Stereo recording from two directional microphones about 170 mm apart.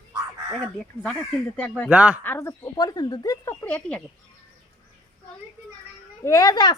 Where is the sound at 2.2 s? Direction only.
15° left (ahead or behind).